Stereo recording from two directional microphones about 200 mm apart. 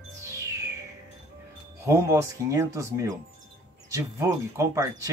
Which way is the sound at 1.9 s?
15° right (ahead or behind).